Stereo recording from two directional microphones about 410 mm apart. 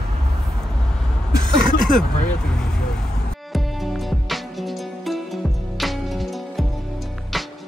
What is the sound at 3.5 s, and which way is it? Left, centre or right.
Music, centre.